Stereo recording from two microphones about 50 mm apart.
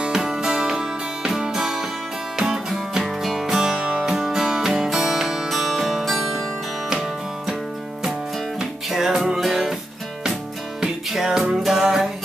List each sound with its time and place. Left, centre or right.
0.0 s music: centre
8.5 s music: centre
11.1 s music: centre